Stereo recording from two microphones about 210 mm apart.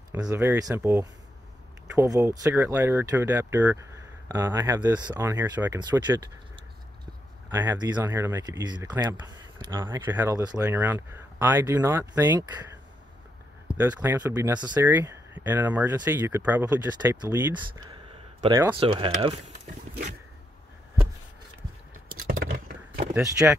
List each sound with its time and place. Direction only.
0.1 s speech: 15° right (ahead or behind)
13.7 s speech: 5° right (ahead or behind)
17.8 s a sound: 20° right (ahead or behind)
18.8 s speech: 25° right (ahead or behind)
22.1 s a sound: 45° right (ahead or behind)
23.1 s speech: 10° right (ahead or behind)